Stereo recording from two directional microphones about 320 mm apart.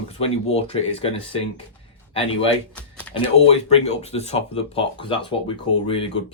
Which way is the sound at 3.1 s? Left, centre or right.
Centre.